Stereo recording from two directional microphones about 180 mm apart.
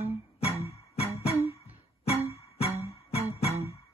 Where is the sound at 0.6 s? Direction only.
35° left (ahead or behind).